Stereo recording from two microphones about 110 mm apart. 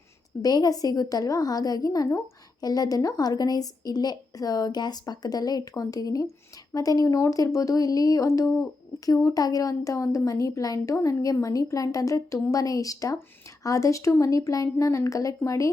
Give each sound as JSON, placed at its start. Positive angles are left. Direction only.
{"t": 0.4, "sound": "a woman's voice", "side_deg": 35}